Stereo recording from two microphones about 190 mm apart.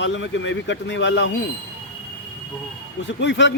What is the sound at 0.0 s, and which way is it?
Speech, 75° left (ahead or behind).